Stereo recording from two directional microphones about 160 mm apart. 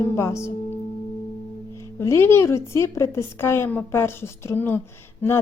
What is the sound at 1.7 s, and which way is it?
A woman's voice, 15° left (ahead or behind).